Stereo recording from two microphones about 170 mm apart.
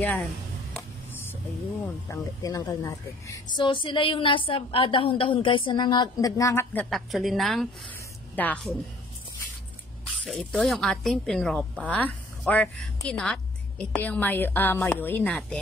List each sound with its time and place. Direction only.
0.0 s a woman's voice: 10° left (ahead or behind)
0.7 s a sound: 10° left (ahead or behind)
2.0 s a woman's voice: 20° left (ahead or behind)
10.2 s a woman's voice: 5° left (ahead or behind)